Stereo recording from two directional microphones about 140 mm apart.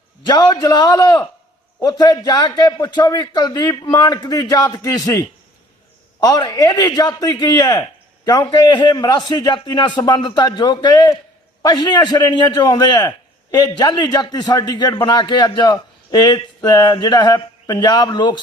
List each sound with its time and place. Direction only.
0.2 s a man's voice: 30° left (ahead or behind)